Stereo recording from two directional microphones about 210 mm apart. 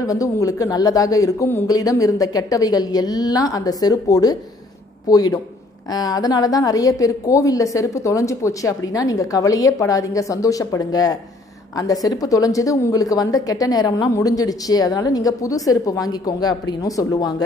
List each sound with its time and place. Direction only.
0.0 s a woman's voice: 15° left (ahead or behind)